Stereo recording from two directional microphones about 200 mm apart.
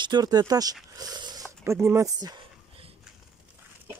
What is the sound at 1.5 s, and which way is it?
Speech, 15° right (ahead or behind).